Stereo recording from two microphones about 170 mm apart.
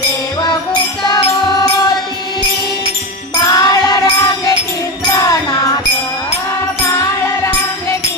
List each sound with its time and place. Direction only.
1.0 s music: 25° left (ahead or behind)
3.4 s music: 25° left (ahead or behind)